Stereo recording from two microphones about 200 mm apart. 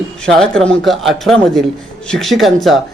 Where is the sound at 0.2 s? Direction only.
5° left (ahead or behind).